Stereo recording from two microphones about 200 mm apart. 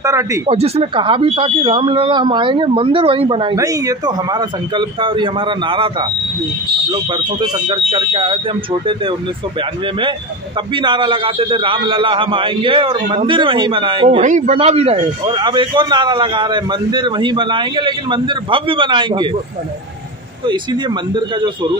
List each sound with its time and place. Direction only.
0.0 s speech: 15° right (ahead or behind)
0.5 s a man's voice: 30° right (ahead or behind)
20.4 s a man's voice: 25° right (ahead or behind)